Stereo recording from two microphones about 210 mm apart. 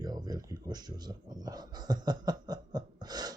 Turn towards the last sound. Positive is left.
turn(degrees=-20)  # may be behind; listen again after turning